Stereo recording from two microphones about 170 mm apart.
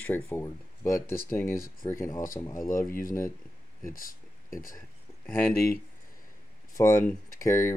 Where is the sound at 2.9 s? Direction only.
55° left (ahead or behind).